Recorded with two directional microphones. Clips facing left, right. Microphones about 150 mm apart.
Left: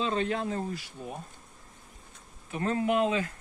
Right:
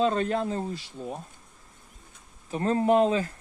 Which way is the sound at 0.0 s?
45° right (ahead or behind).